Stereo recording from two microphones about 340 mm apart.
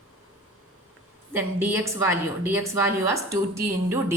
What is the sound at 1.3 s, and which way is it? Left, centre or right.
Speech, centre.